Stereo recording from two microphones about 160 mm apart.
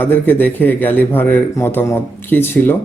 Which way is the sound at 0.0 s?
15° left (ahead or behind).